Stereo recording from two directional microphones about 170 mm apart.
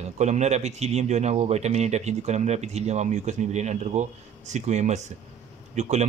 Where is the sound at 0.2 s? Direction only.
40° right (ahead or behind).